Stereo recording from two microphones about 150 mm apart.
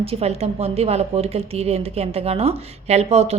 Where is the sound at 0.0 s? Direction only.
40° right (ahead or behind).